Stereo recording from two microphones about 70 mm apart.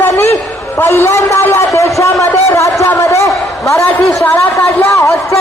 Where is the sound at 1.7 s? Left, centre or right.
Left.